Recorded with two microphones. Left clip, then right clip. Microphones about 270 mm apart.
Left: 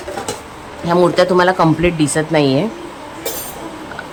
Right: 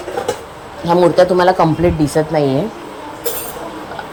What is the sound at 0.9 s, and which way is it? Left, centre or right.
Speech, centre.